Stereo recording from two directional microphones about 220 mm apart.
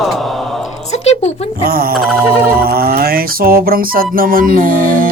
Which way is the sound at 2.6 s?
45° right (ahead or behind).